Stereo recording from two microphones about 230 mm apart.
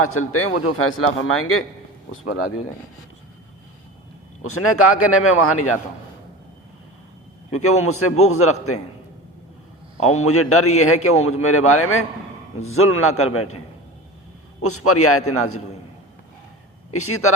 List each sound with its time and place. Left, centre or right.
0.0 s a man's voice: left
4.4 s a man's voice: left
7.5 s a man's voice: left
10.0 s a man's voice: left
14.6 s a man's voice: left
16.9 s a man's voice: left